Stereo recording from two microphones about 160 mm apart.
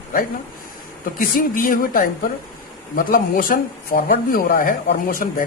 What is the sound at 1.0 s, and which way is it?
Speech, 60° left (ahead or behind).